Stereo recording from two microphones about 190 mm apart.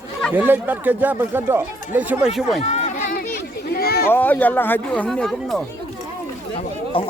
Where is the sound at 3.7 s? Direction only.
55° left (ahead or behind).